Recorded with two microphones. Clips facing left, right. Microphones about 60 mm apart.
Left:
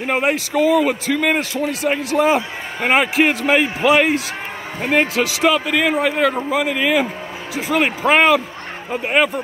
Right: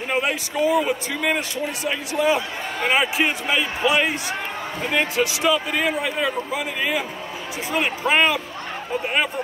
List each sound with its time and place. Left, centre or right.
0.1 s a man's voice: left
0.6 s a man's voice: left
2.9 s a man's voice: left
3.8 s speech: left
5.1 s speech: left
5.9 s a man's voice: left